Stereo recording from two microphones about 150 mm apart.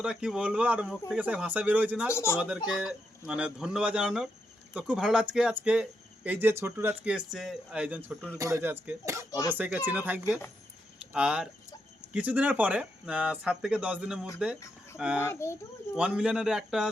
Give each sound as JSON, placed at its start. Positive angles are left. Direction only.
{"t": 0.0, "sound": "a man's voice", "side_deg": -5}
{"t": 2.0, "sound": "speech", "side_deg": 15}
{"t": 2.6, "sound": "a man's voice", "side_deg": -5}
{"t": 8.1, "sound": "speech", "side_deg": 10}
{"t": 8.4, "sound": "speech", "side_deg": -20}
{"t": 15.3, "sound": "speech", "side_deg": 20}
{"t": 16.0, "sound": "a man's voice", "side_deg": -5}